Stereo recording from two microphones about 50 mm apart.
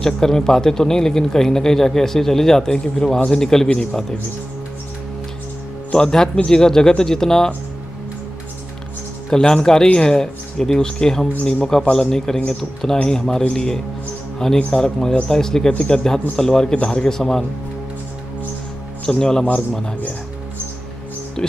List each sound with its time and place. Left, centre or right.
0.0 s a man's voice: centre
5.9 s a man's voice: centre
9.3 s a man's voice: centre
19.0 s a man's voice: centre
21.4 s speech: centre